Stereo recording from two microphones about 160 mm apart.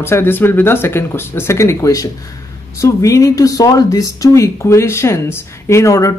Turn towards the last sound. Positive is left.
turn(degrees=20)  # may be behind; listen again after turning